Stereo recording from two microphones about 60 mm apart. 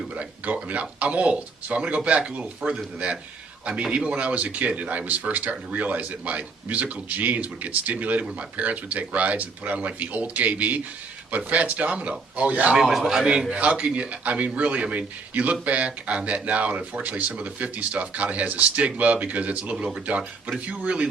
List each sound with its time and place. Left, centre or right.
0.2 s speech: right
12.7 s speech: centre; by 21.1 s right